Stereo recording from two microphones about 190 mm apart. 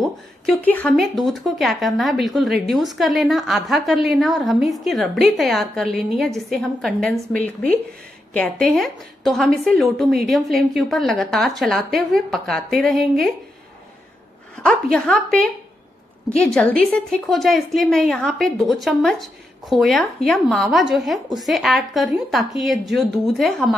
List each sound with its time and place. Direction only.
0.0 s a woman's voice: 5° left (ahead or behind)
14.6 s a woman's voice: 5° left (ahead or behind)